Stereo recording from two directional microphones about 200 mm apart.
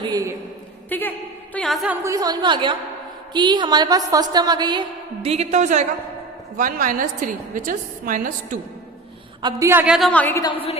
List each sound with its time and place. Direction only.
0.0 s a sound: 20° right (ahead or behind)
0.9 s a sound: 10° left (ahead or behind)
1.5 s a woman's voice: centre (ahead or behind)
2.0 s a woman's voice: 15° right (ahead or behind); by 8.5 s 40° right (ahead or behind)
9.4 s a woman's voice: 20° right (ahead or behind); by 10.5 s 10° left (ahead or behind)
10.5 s a woman's voice: 30° left (ahead or behind)